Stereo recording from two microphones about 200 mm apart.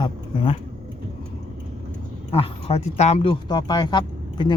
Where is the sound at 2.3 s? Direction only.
30° left (ahead or behind).